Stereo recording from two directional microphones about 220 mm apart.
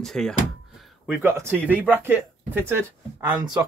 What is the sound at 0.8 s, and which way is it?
Speech, 10° right (ahead or behind).